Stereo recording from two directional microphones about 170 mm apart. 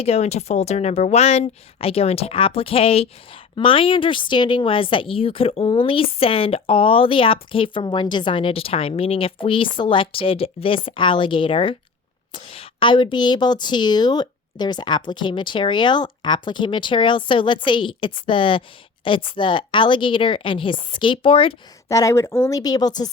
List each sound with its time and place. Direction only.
0.0 s a woman's voice: 40° left (ahead or behind)
21.8 s a woman's voice: 20° left (ahead or behind)